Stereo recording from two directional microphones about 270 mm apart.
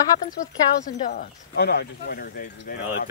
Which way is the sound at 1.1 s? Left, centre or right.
Left.